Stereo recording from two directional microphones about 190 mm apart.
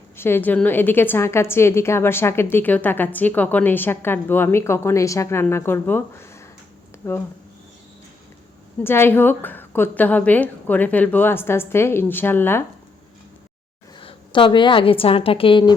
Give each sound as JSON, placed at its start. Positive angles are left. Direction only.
{"t": 0.2, "sound": "a woman's voice", "side_deg": 10}
{"t": 8.8, "sound": "a woman's voice", "side_deg": 10}
{"t": 14.0, "sound": "a woman's voice", "side_deg": 25}